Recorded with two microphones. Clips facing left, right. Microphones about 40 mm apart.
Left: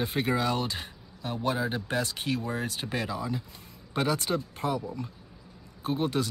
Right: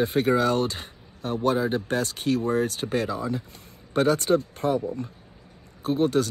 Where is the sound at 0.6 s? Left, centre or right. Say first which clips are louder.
Right 4 dB; right.